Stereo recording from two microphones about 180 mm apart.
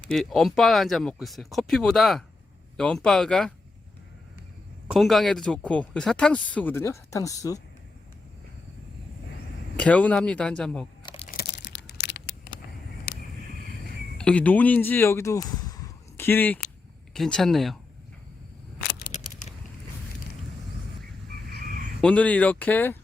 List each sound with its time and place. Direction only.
0.1 s speech: centre (ahead or behind)
4.9 s speech: centre (ahead or behind); by 7.6 s 20° left (ahead or behind)
9.7 s speech: 5° left (ahead or behind)
11.0 s crumpling: 30° left (ahead or behind)
11.3 s a sound: 60° left (ahead or behind)
14.2 s speech: 5° left (ahead or behind)
18.9 s scissors: 45° left (ahead or behind)
22.0 s speech: 5° left (ahead or behind)